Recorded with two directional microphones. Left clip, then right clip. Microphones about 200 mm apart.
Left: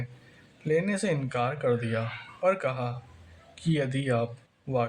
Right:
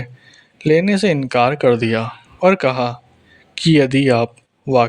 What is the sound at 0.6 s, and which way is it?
Speech, 40° right (ahead or behind).